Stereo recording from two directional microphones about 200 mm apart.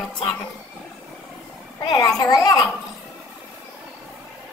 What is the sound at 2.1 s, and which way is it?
Speech, 20° left (ahead or behind).